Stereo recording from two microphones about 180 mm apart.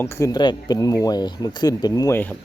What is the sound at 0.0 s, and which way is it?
Speech, 20° left (ahead or behind).